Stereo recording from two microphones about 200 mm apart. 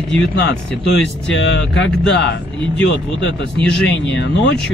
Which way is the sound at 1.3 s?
60° left (ahead or behind).